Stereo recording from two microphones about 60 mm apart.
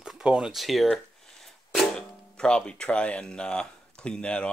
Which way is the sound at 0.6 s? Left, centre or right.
Centre.